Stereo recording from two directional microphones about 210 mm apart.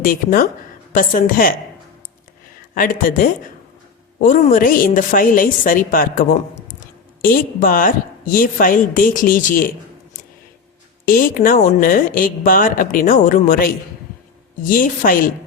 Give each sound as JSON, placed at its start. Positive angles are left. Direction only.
{"t": 0.0, "sound": "a woman's voice", "side_deg": 45}
{"t": 2.7, "sound": "speech", "side_deg": 40}
{"t": 11.0, "sound": "speech", "side_deg": 40}